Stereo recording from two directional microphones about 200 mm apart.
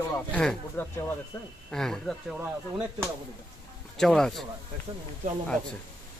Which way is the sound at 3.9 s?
Centre (ahead or behind).